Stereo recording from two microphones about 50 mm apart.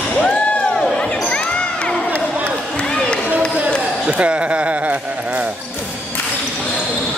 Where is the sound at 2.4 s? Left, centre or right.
Centre.